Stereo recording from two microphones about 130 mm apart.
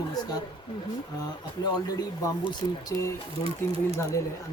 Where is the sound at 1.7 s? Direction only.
30° left (ahead or behind).